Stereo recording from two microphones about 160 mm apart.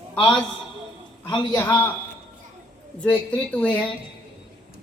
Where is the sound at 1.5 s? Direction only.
15° left (ahead or behind).